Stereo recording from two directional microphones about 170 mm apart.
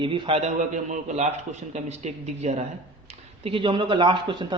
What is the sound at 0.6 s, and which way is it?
A man's voice, 45° right (ahead or behind).